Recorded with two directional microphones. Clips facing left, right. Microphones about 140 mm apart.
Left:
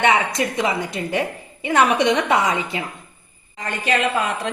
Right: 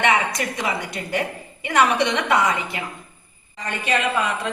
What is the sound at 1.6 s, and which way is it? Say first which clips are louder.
A woman's voice: left 2 dB; 25° left (ahead or behind).